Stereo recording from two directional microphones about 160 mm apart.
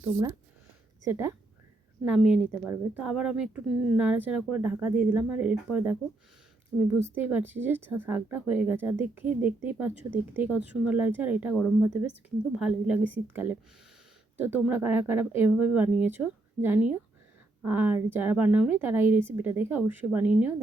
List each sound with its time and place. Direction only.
0.0 s a woman's voice: 20° right (ahead or behind)
2.0 s a woman's voice: 5° right (ahead or behind)
7.0 s a woman's voice: 10° right (ahead or behind)
12.5 s a woman's voice: 5° right (ahead or behind)